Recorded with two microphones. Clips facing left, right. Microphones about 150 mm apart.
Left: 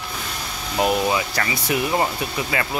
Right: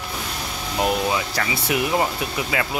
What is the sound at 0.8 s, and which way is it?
Speech, centre (ahead or behind).